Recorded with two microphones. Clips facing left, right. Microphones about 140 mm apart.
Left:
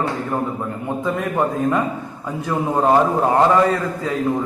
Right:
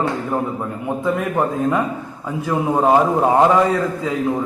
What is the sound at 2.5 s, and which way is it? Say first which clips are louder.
A man's voice: right 1 dB; 5° right (ahead or behind).